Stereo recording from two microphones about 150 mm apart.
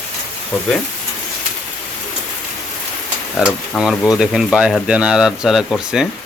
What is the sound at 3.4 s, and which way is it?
Speech, 5° right (ahead or behind).